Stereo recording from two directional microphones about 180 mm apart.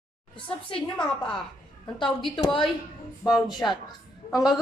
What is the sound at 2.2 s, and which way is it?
Speech, 25° left (ahead or behind).